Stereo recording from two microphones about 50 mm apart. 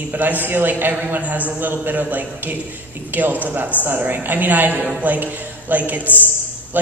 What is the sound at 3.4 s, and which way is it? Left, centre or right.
A woman's voice, right.